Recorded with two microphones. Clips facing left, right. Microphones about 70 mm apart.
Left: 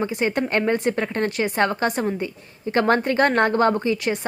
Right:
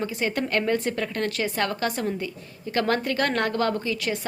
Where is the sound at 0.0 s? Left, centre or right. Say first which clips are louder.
Left 4 dB; left.